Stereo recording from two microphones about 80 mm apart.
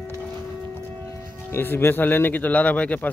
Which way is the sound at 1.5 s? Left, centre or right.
Left.